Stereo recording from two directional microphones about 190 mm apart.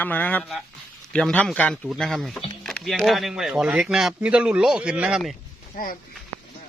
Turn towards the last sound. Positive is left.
turn(degrees=45)  # may be behind; listen again after turning